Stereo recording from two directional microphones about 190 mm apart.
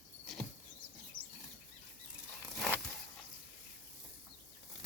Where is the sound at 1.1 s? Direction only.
45° left (ahead or behind).